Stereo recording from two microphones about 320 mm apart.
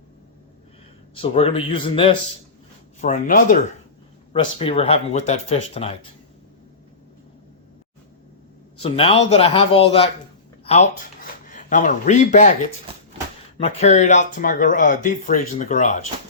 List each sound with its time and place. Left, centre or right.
1.1 s a man's voice: centre
8.8 s a man's voice: centre
11.4 s speech: left
13.6 s speech: centre